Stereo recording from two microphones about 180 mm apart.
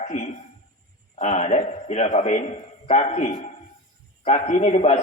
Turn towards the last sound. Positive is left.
turn(degrees=35)  # may be behind; listen again after turning